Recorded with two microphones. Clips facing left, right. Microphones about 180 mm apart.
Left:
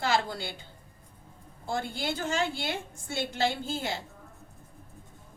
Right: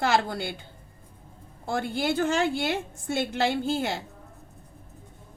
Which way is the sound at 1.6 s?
55° right (ahead or behind).